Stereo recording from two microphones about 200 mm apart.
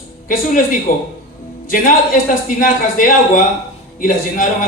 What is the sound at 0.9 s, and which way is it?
A man's voice, 45° left (ahead or behind).